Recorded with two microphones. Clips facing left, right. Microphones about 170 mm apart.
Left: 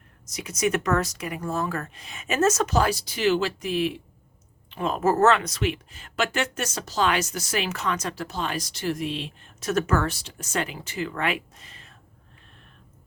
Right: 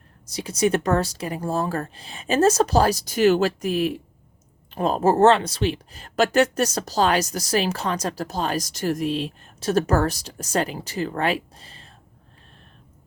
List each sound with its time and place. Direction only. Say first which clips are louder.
0.3 s speech: right 4 dB; 30° right (ahead or behind)